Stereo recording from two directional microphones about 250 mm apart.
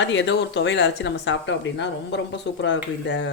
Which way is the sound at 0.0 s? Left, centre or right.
Left.